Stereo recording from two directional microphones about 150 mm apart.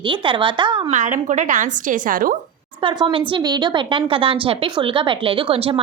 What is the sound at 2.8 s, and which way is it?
A woman's voice, 35° right (ahead or behind).